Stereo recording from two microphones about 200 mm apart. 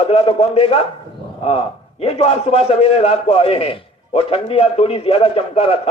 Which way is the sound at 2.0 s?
30° left (ahead or behind).